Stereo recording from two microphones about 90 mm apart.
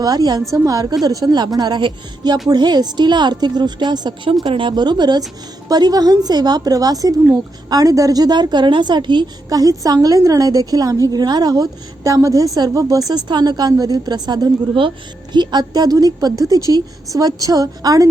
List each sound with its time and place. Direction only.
0.0 s a woman's voice: 50° right (ahead or behind)
4.4 s a woman's voice: 65° right (ahead or behind); by 14.5 s 50° right (ahead or behind)
14.8 s a woman's voice: 60° right (ahead or behind); by 18.1 s 45° right (ahead or behind)